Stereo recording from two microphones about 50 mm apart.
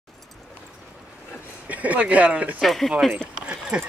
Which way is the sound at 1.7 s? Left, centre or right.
Right.